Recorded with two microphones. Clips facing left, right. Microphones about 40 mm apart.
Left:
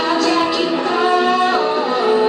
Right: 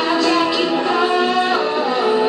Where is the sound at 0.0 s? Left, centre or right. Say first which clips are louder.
Even; centre.